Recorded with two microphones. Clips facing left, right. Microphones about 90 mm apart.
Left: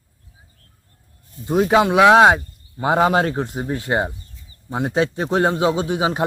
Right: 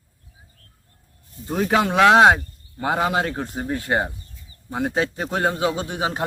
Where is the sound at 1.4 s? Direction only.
15° left (ahead or behind).